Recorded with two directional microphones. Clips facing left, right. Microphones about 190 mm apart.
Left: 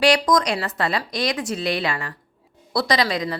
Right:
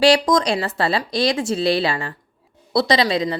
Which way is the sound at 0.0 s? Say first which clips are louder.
Right 3 dB; 30° right (ahead or behind).